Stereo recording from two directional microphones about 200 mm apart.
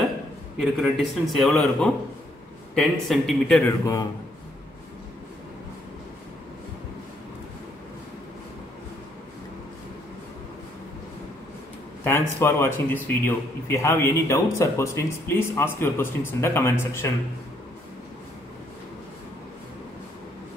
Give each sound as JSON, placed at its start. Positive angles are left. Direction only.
{"t": 0.6, "sound": "a man's voice", "side_deg": 0}
{"t": 3.8, "sound": "speech", "side_deg": 15}
{"t": 12.0, "sound": "speech", "side_deg": 10}